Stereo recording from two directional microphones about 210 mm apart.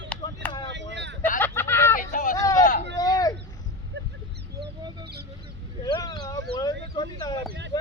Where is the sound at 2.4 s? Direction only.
15° left (ahead or behind).